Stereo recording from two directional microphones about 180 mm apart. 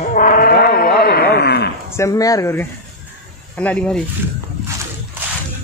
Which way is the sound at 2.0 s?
20° left (ahead or behind).